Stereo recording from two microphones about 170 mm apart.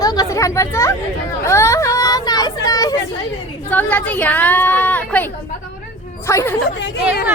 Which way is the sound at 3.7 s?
10° left (ahead or behind).